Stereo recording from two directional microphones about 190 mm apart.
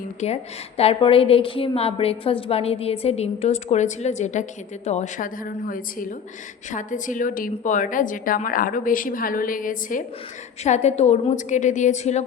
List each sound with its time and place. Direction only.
0.2 s a woman's voice: 35° left (ahead or behind)